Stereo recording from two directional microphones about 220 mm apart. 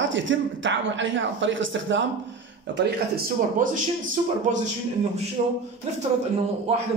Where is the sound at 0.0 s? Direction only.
60° right (ahead or behind).